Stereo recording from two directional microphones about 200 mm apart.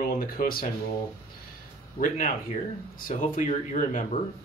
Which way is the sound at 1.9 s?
40° left (ahead or behind).